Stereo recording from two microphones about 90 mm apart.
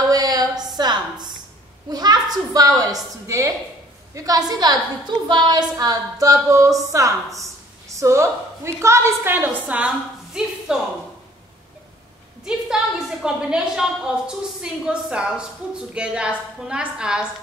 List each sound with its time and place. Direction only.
0.1 s a sound: 45° right (ahead or behind)
2.5 s a woman's voice: 45° right (ahead or behind); by 10.8 s 10° right (ahead or behind)
12.4 s a woman's voice: 10° right (ahead or behind)